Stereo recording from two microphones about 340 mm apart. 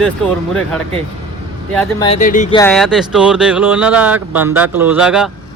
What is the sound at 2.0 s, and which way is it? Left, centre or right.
Speech, left.